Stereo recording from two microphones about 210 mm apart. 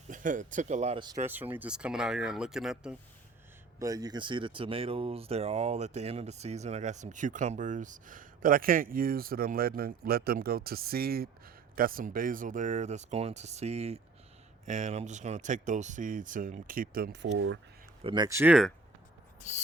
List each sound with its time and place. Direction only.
0.1 s speech: 40° right (ahead or behind)
1.3 s speech: 10° right (ahead or behind)
3.8 s speech: 15° right (ahead or behind); by 17.2 s 45° right (ahead or behind)
17.3 s speech: 65° right (ahead or behind)
18.0 s speech: 20° right (ahead or behind)
19.4 s owl: 35° left (ahead or behind)